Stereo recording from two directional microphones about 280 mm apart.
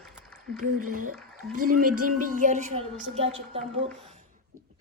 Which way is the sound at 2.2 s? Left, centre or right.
Right.